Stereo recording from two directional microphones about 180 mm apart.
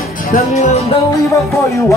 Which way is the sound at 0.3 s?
40° left (ahead or behind).